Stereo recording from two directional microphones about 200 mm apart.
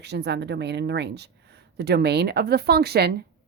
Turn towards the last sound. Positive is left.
turn(degrees=-55)  # may be behind; listen again after turning